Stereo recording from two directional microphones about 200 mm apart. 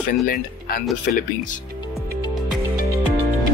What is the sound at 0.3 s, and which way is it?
Speech, 45° left (ahead or behind).